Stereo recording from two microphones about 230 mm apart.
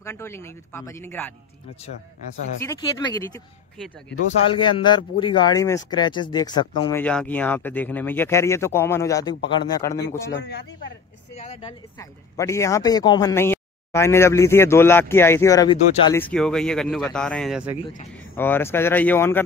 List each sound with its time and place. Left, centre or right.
0.0 s speech: centre
2.6 s speech: centre
4.5 s speech: left
7.0 s speech: centre
10.3 s speech: left
11.3 s a sound: left
12.0 s speech: centre
18.3 s speech: centre